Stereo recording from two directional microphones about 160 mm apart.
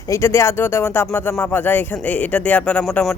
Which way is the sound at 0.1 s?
15° left (ahead or behind).